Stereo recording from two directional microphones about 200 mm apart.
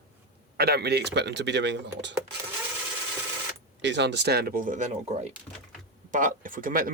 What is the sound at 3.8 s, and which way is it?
Speech, 60° right (ahead or behind).